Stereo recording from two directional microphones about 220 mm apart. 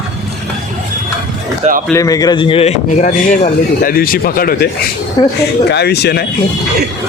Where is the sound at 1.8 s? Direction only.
15° left (ahead or behind); by 4.7 s 40° left (ahead or behind).